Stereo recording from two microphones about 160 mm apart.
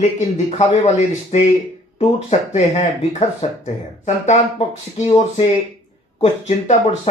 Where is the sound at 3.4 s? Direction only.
40° left (ahead or behind).